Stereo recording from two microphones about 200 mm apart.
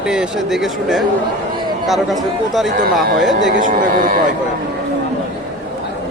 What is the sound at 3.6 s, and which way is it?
Speech, 40° right (ahead or behind).